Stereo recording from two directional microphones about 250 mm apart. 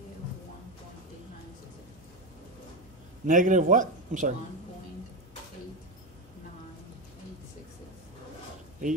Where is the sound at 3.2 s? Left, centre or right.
Right.